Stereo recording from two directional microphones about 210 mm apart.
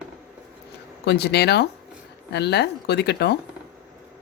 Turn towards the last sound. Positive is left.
turn(degrees=50)  # may be behind; listen again after turning